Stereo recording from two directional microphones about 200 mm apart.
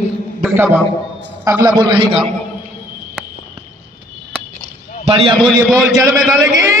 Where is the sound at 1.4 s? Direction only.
15° right (ahead or behind).